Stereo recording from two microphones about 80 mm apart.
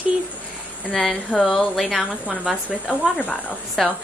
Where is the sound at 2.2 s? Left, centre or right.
Centre.